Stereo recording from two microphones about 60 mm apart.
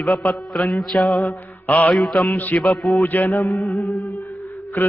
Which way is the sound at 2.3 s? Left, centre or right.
Left.